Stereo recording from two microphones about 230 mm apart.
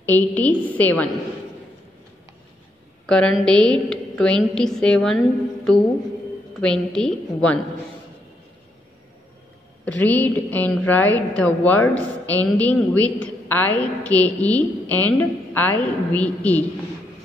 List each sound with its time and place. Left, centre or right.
0.0 s a woman's voice: centre
3.1 s a woman's voice: centre
6.6 s a woman's voice: centre
9.8 s a woman's voice: centre